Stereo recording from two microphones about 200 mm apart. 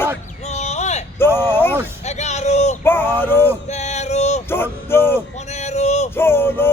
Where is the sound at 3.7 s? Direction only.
35° left (ahead or behind).